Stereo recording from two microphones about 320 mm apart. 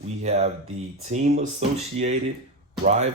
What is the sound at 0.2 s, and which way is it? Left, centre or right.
Speech, right.